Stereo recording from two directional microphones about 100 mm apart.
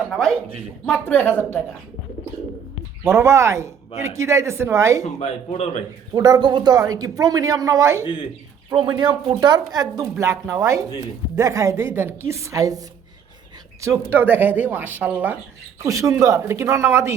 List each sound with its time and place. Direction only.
0.1 s speech: 5° left (ahead or behind)
0.9 s a woman's voice: 15° left (ahead or behind)
1.3 s speech: 25° right (ahead or behind)
3.0 s speech: 25° right (ahead or behind)
5.2 s speech: 90° left
6.1 s a woman's voice: 40° right (ahead or behind)
8.8 s a woman's voice: 55° right (ahead or behind); by 12.8 s 35° right (ahead or behind)
13.8 s speech: 25° right (ahead or behind)
15.8 s a woman's voice: 35° right (ahead or behind)